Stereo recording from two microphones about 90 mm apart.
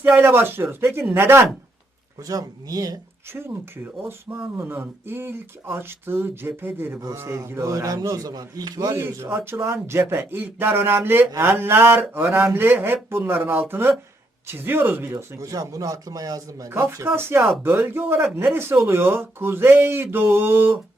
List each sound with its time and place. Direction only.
0.2 s speech: 25° right (ahead or behind)
2.2 s speech: 40° right (ahead or behind)
3.3 s speech: 25° right (ahead or behind); by 9.0 s 50° right (ahead or behind)
9.1 s speech: 30° right (ahead or behind)
15.1 s speech: 35° right (ahead or behind)